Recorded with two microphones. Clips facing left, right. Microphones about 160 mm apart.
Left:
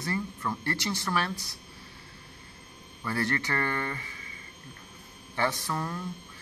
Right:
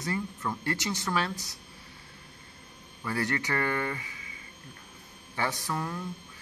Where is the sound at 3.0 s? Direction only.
15° right (ahead or behind).